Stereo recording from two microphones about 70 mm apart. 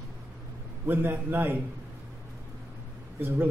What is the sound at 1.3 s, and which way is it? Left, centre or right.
Speech, right.